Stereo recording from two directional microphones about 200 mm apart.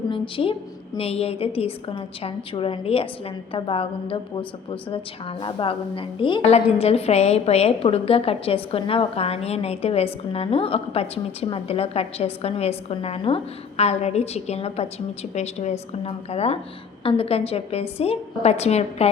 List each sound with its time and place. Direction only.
0.1 s a woman's voice: 25° left (ahead or behind)